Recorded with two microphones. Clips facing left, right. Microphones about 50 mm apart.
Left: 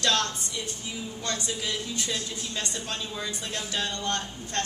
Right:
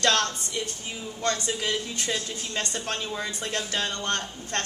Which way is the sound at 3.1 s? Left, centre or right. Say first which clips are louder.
Right 3 dB; right.